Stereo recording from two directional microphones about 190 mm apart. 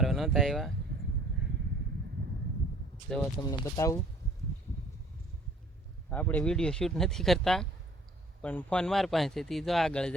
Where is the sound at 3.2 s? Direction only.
20° left (ahead or behind).